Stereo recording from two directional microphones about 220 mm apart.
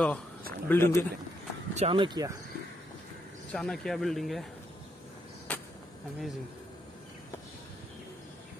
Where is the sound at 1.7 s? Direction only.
25° right (ahead or behind).